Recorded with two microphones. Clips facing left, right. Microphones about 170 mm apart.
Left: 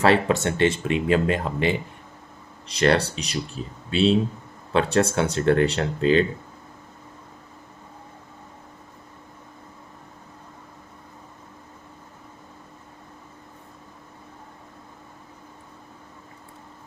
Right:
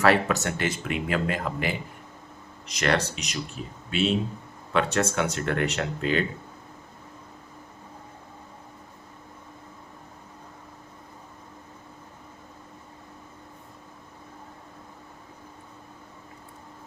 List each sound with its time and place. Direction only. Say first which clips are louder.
0.0 s speech: left 3 dB; 30° left (ahead or behind)